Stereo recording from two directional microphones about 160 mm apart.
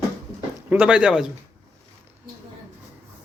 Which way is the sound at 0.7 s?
5° right (ahead or behind).